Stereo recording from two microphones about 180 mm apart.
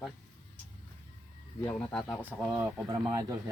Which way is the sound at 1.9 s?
5° left (ahead or behind).